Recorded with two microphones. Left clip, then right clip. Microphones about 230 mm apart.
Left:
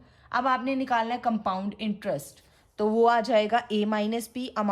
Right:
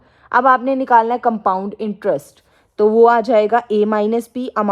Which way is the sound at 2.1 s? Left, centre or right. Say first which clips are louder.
Right 12 dB; right.